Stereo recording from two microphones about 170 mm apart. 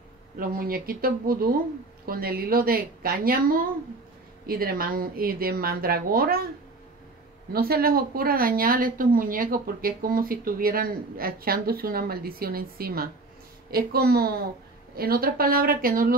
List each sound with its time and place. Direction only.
0.4 s a woman's voice: 60° right (ahead or behind)
7.5 s a woman's voice: 65° right (ahead or behind)